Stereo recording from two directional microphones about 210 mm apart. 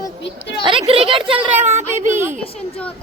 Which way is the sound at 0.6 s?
25° right (ahead or behind).